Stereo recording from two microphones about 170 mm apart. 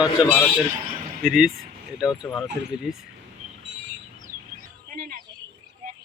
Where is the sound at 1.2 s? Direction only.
Centre (ahead or behind).